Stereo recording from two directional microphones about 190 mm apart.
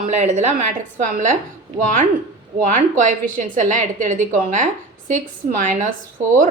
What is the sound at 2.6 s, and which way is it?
Speech, 40° right (ahead or behind).